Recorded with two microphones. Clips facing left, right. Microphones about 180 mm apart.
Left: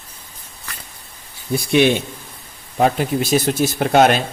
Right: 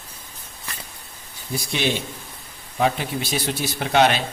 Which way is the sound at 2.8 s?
50° left (ahead or behind).